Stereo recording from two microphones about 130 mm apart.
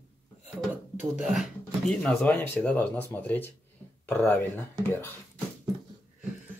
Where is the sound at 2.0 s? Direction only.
10° left (ahead or behind).